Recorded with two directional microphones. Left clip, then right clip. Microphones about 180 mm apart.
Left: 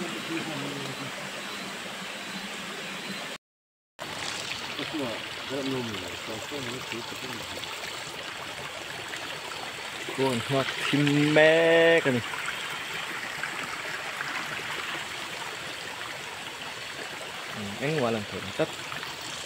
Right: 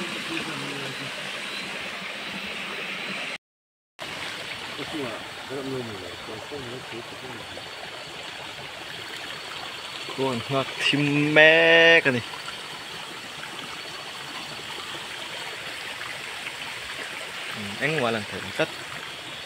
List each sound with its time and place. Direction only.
10.2 s speech: 5° left (ahead or behind)
17.8 s speech: centre (ahead or behind)